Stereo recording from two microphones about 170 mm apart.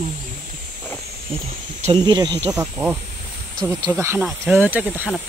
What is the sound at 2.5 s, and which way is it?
Speech, 10° right (ahead or behind).